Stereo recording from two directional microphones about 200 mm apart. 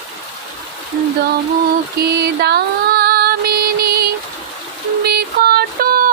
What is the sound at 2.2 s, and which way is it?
Music, 55° right (ahead or behind).